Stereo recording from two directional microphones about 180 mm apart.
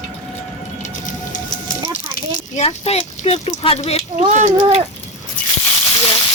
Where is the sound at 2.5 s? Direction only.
35° left (ahead or behind).